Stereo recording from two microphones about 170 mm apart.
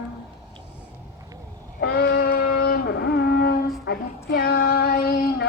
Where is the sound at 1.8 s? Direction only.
70° left (ahead or behind).